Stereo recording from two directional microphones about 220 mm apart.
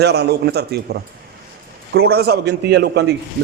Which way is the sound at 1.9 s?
45° right (ahead or behind).